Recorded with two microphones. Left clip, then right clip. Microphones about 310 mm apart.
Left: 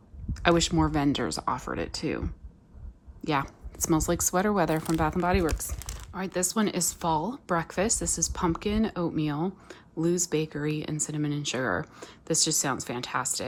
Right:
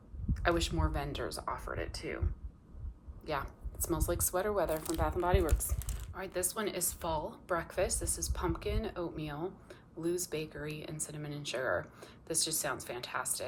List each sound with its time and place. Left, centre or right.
0.4 s speech: centre